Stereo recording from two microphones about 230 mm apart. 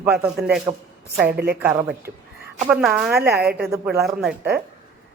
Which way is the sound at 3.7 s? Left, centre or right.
Centre.